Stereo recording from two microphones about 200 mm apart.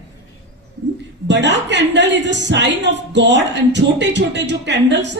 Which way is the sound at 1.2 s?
60° right (ahead or behind).